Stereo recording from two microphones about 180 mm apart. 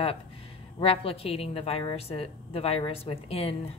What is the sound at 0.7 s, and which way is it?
A woman's voice, 30° left (ahead or behind).